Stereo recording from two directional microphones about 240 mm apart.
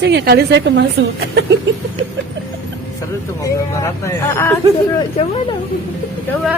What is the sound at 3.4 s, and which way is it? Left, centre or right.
Speech, centre.